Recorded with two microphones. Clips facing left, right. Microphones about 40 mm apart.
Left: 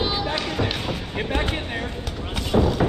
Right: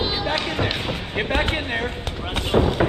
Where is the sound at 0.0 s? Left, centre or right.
Centre.